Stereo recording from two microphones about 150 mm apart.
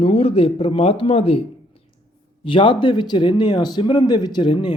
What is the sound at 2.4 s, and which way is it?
A man's voice, 35° left (ahead or behind).